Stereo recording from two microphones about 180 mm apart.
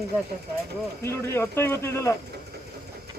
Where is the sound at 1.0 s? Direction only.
15° left (ahead or behind).